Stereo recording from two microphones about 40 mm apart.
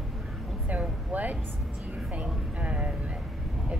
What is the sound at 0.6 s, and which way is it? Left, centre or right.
Speech, right.